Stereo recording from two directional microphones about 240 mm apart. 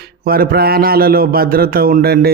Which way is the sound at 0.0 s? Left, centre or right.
Right.